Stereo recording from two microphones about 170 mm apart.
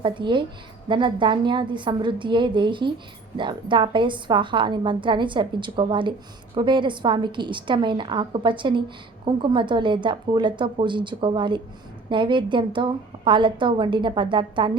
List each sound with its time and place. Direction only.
0.0 s a woman's voice: 30° right (ahead or behind)